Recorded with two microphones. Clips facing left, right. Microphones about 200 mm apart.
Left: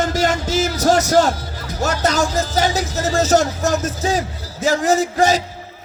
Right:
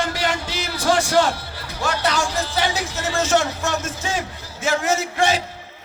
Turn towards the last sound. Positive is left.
turn(degrees=40)  # may be behind; listen again after turning